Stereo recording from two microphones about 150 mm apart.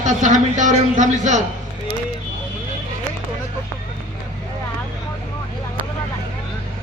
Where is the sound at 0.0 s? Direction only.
55° right (ahead or behind).